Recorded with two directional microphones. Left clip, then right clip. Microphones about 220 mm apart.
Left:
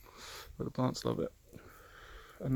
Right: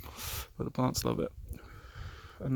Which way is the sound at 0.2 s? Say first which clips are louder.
Right 3 dB; 30° right (ahead or behind).